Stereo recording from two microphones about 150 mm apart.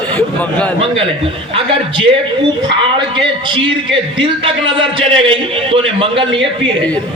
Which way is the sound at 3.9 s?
35° right (ahead or behind).